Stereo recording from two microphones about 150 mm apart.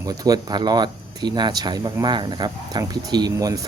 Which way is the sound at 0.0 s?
25° right (ahead or behind).